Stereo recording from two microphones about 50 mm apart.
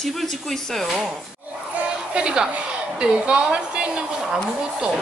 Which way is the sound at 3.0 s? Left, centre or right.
Right.